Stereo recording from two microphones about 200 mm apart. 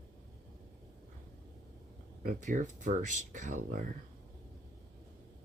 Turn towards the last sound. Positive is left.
turn(degrees=-40)  # may be behind; listen again after turning